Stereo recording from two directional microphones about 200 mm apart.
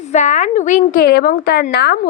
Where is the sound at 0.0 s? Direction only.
35° left (ahead or behind).